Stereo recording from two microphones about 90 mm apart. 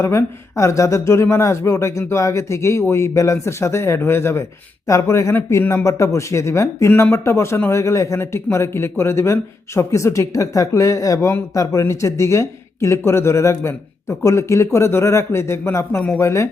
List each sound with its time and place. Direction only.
0.0 s speech: 30° left (ahead or behind)